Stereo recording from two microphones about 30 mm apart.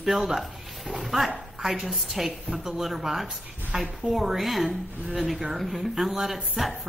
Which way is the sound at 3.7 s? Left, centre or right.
Right.